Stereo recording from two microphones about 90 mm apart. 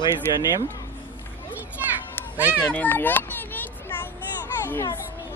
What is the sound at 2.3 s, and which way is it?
Speech, 20° right (ahead or behind).